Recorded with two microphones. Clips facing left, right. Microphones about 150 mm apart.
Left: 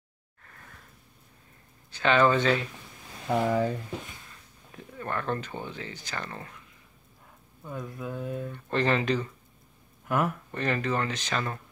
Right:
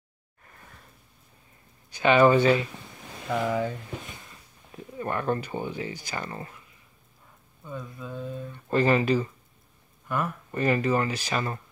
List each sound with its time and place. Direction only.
1.9 s speech: 10° right (ahead or behind)
3.3 s speech: 40° left (ahead or behind)
4.9 s speech: 15° right (ahead or behind)
7.6 s speech: 10° left (ahead or behind)
8.6 s speech: 5° right (ahead or behind)
10.0 s speech: 15° left (ahead or behind)
10.5 s speech: 10° right (ahead or behind)